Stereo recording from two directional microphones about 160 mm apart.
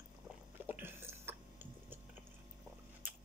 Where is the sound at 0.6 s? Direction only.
15° right (ahead or behind).